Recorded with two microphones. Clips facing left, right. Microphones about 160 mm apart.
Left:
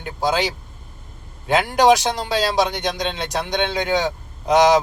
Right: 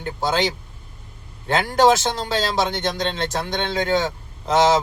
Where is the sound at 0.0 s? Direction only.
10° left (ahead or behind).